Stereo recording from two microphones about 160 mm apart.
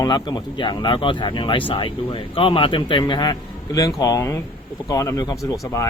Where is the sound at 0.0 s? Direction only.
25° left (ahead or behind).